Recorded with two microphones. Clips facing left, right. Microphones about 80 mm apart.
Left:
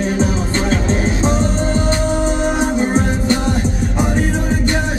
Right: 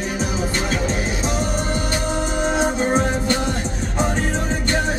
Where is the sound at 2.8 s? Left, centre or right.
Centre.